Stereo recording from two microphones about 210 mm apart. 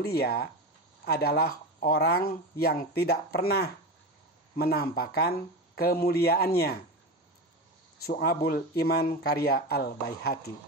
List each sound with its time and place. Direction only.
0.0 s speech: 50° left (ahead or behind)
8.5 s speech: 45° left (ahead or behind)